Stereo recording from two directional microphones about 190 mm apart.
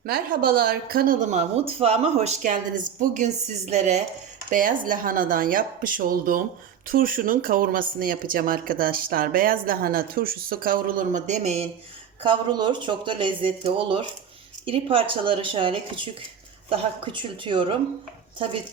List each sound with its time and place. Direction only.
0.0 s speech: 50° right (ahead or behind)
12.2 s speech: 25° right (ahead or behind)